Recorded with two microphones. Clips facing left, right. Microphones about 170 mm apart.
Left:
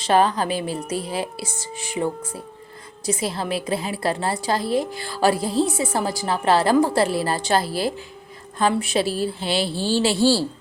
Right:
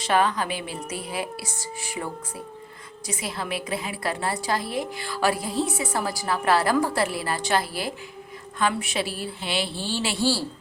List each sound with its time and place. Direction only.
0.0 s a woman's voice: 35° left (ahead or behind)
3.1 s a woman's voice: 30° left (ahead or behind)